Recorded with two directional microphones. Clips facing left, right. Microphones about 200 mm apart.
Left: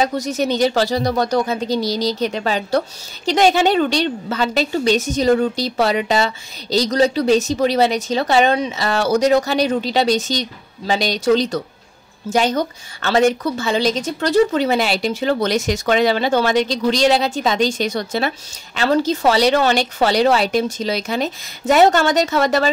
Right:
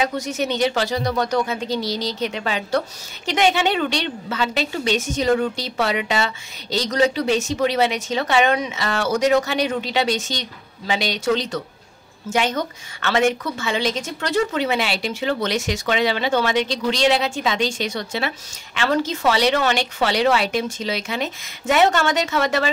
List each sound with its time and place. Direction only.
0.0 s a woman's voice: 35° left (ahead or behind)